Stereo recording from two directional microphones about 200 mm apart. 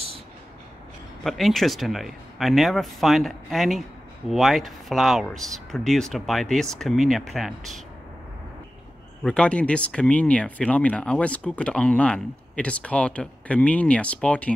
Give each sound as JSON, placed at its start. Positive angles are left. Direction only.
{"t": 1.2, "sound": "speech", "side_deg": 0}
{"t": 9.2, "sound": "speech", "side_deg": 5}